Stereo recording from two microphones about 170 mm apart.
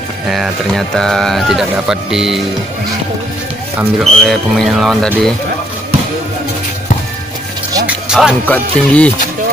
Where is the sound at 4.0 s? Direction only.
Centre (ahead or behind).